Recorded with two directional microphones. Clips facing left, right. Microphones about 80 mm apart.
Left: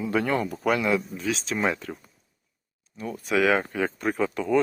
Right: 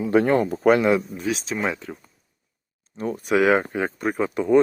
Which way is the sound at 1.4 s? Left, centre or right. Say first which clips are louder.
Even; centre.